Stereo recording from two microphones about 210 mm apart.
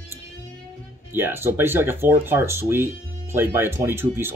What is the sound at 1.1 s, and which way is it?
Speech, 10° right (ahead or behind).